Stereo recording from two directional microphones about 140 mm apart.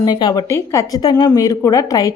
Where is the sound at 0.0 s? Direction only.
30° left (ahead or behind).